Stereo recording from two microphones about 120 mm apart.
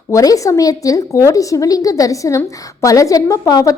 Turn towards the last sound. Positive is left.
turn(degrees=30)  # may be behind; listen again after turning